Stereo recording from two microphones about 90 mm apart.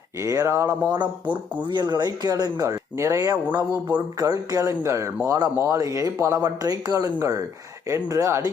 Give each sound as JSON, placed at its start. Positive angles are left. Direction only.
{"t": 0.2, "sound": "speech", "side_deg": -35}
{"t": 1.6, "sound": "speech", "side_deg": -55}